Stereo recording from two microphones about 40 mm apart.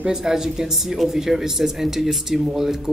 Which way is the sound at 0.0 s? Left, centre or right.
Centre.